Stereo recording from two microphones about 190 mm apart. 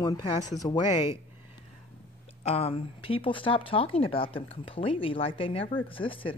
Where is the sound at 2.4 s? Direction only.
30° left (ahead or behind).